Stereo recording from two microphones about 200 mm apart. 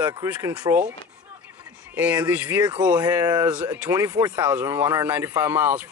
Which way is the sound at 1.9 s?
10° right (ahead or behind).